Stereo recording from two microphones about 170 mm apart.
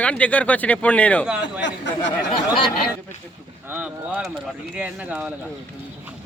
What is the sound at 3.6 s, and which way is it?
Speech, 10° right (ahead or behind).